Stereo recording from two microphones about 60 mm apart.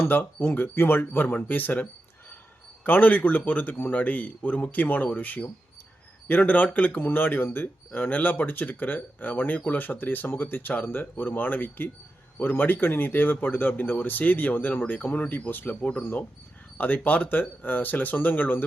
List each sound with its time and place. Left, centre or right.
0.0 s a man's voice: left
15.8 s a man's voice: centre
16.7 s speech: left